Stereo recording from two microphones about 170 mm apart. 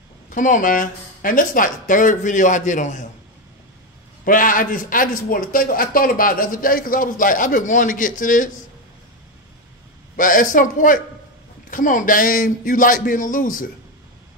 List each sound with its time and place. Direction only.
0.3 s a man's voice: 50° left (ahead or behind)
4.2 s a man's voice: 50° left (ahead or behind)
10.1 s a man's voice: 50° left (ahead or behind)